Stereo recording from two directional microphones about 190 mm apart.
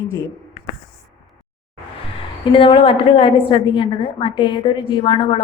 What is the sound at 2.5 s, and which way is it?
A woman's voice, 30° left (ahead or behind).